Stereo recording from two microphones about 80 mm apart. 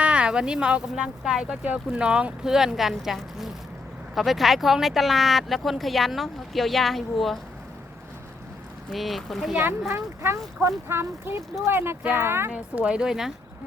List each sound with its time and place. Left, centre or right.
0.0 s speech: centre
8.9 s speech: centre
9.9 s speech: right
12.5 s speech: centre